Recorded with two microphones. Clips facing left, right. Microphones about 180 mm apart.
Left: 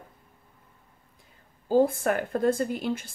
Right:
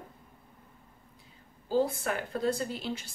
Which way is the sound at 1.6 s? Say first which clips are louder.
Left 6 dB; 50° left (ahead or behind).